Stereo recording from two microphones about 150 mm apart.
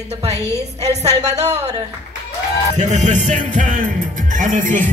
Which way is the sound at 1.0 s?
45° right (ahead or behind).